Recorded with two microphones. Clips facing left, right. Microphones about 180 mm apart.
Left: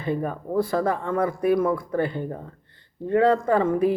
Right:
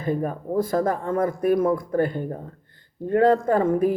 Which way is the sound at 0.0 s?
45° right (ahead or behind).